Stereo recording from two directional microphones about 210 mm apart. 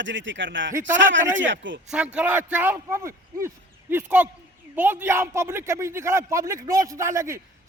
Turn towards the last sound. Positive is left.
turn(degrees=-15)  # may be behind; listen again after turning